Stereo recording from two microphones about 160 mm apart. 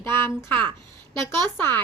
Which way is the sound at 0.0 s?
15° left (ahead or behind).